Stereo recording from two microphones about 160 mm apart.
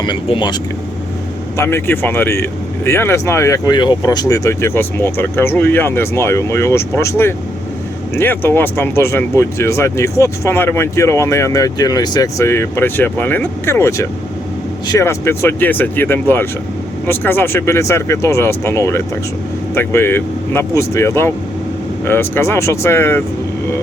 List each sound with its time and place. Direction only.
0.0 s speech: 30° left (ahead or behind)
1.5 s speech: 15° left (ahead or behind)